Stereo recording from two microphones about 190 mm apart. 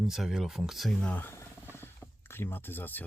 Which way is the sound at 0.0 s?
Centre (ahead or behind).